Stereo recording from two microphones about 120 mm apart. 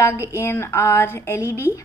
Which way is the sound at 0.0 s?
25° left (ahead or behind).